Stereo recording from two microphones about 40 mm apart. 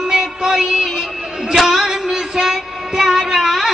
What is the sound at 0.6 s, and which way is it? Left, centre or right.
Music, centre.